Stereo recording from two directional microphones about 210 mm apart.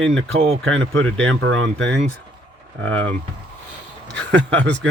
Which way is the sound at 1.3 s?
65° right (ahead or behind).